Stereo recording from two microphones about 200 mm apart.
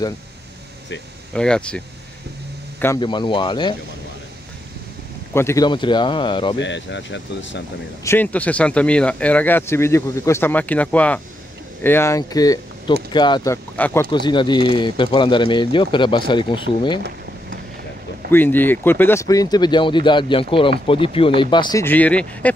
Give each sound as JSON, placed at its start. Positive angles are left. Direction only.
{"t": 1.3, "sound": "speech", "side_deg": 5}
{"t": 3.0, "sound": "speech", "side_deg": 25}
{"t": 5.3, "sound": "speech", "side_deg": 15}
{"t": 5.7, "sound": "speech", "side_deg": 25}
{"t": 6.6, "sound": "speech", "side_deg": 65}
{"t": 8.0, "sound": "speech", "side_deg": 10}
{"t": 14.1, "sound": "speech", "side_deg": 25}
{"t": 18.3, "sound": "speech", "side_deg": 10}
{"t": 21.8, "sound": "speech", "side_deg": 10}